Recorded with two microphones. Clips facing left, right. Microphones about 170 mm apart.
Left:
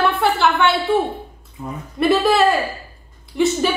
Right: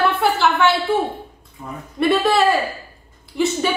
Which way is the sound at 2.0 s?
Centre (ahead or behind).